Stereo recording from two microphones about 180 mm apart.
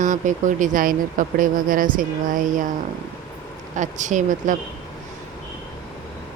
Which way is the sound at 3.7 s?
45° right (ahead or behind).